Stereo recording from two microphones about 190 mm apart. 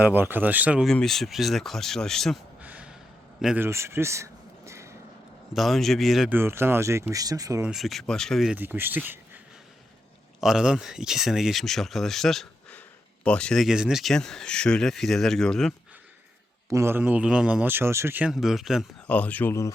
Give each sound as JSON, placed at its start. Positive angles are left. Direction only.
{"t": 0.0, "sound": "speech", "side_deg": -10}
{"t": 3.4, "sound": "a sound", "side_deg": -10}
{"t": 5.5, "sound": "speech", "side_deg": 0}
{"t": 7.7, "sound": "speech", "side_deg": 0}
{"t": 10.4, "sound": "speech", "side_deg": -5}
{"t": 16.6, "sound": "speech", "side_deg": -15}